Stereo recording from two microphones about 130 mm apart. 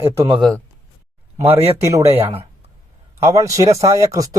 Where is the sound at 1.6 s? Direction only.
25° right (ahead or behind).